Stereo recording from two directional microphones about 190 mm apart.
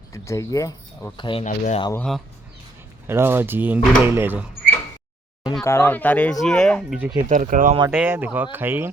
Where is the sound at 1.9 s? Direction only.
5° left (ahead or behind).